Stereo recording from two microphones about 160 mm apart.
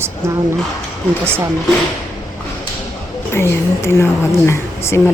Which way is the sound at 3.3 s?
15° left (ahead or behind).